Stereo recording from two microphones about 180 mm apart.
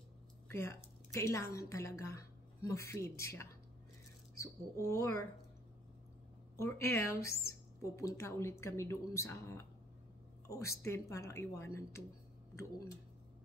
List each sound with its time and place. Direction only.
0.5 s a woman's voice: 15° left (ahead or behind)
6.5 s speech: 15° left (ahead or behind)